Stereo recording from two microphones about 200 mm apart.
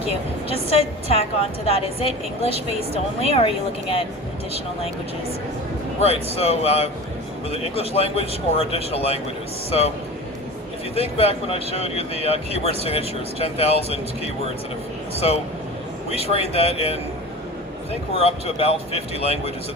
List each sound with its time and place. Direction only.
0.1 s a woman's voice: 30° left (ahead or behind)
6.3 s a woman's voice: 30° left (ahead or behind)
10.9 s a woman's voice: 30° left (ahead or behind)
15.1 s speech: 30° left (ahead or behind)
18.2 s a woman's voice: 30° left (ahead or behind)